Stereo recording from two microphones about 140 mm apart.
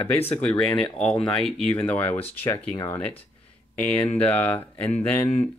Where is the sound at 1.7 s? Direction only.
15° left (ahead or behind).